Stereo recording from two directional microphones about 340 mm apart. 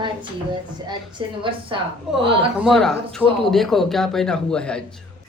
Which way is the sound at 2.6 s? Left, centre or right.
Centre.